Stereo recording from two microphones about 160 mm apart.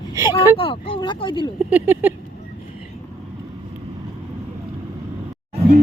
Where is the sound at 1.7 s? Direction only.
10° right (ahead or behind).